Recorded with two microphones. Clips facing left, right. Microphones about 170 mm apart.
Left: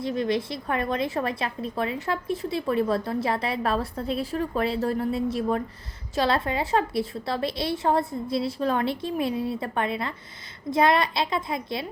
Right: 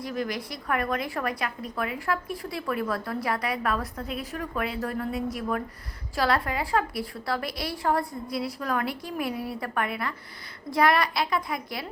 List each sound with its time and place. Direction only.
0.0 s a woman's voice: 25° left (ahead or behind)